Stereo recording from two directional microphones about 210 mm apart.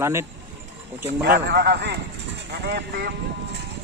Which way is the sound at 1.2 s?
50° right (ahead or behind).